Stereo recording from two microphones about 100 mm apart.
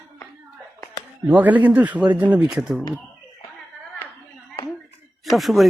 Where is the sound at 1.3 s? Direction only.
15° right (ahead or behind).